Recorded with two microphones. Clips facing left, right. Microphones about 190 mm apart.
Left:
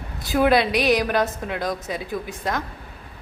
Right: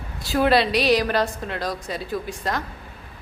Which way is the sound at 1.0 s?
10° left (ahead or behind).